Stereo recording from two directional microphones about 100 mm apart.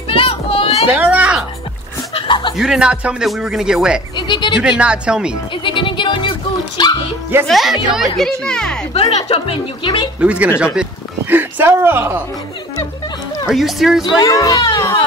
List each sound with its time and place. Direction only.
0.1 s children playing: 75° left (ahead or behind)
0.9 s music: 15° right (ahead or behind)
2.1 s chuckle: 50° left (ahead or behind)
2.5 s speech: 5° right (ahead or behind)
4.3 s speech: 50° left (ahead or behind)
4.6 s speech: 10° right (ahead or behind)
5.6 s music: 55° left (ahead or behind)
6.8 s speech: 45° left (ahead or behind)
7.4 s speech: centre (ahead or behind)
8.9 s a woman's voice: 90° left
10.2 s speech: 10° right (ahead or behind)
13.5 s speech: centre (ahead or behind)
14.3 s a child's voice: 35° left (ahead or behind)